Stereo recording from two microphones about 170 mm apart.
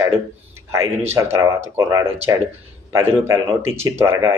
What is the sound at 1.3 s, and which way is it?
Speech, 15° right (ahead or behind).